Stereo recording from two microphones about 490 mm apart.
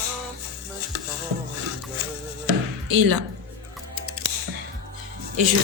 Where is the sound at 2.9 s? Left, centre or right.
Right.